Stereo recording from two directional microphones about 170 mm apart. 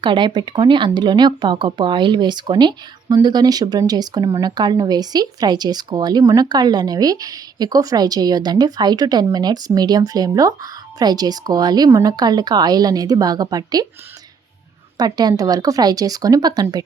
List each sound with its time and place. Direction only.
0.0 s speech: 30° right (ahead or behind)
14.9 s speech: 25° right (ahead or behind)